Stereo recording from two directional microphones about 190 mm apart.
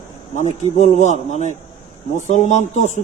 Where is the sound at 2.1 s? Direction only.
35° left (ahead or behind).